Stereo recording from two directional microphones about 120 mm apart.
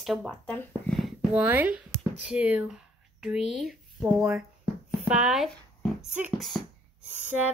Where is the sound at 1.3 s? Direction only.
15° right (ahead or behind).